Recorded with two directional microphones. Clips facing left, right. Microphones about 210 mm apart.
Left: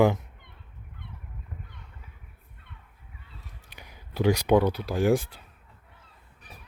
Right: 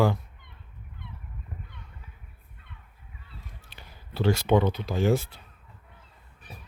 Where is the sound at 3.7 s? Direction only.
15° left (ahead or behind).